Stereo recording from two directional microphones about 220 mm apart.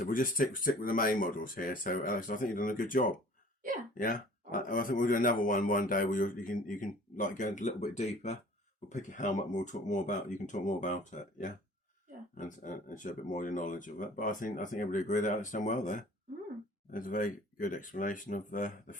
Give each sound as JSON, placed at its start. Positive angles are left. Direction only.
{"t": 0.0, "sound": "a man's voice", "side_deg": 40}